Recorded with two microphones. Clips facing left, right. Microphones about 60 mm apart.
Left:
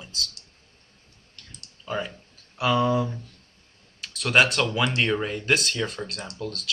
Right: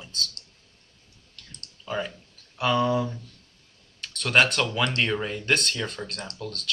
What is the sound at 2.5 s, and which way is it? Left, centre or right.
Speech, centre.